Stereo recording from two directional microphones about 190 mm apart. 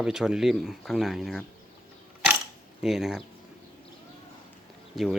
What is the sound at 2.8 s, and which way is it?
Speech, centre (ahead or behind).